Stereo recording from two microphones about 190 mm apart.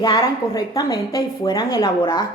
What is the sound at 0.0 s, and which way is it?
A woman's voice, 20° left (ahead or behind).